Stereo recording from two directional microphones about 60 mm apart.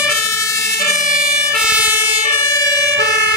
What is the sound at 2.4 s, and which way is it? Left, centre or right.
Emergency vehicle, left.